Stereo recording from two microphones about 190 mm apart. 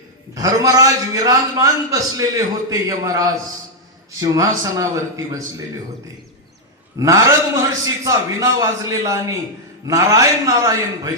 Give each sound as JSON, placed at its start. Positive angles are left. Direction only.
{"t": 0.3, "sound": "a man's voice", "side_deg": -20}
{"t": 7.0, "sound": "a man's voice", "side_deg": -15}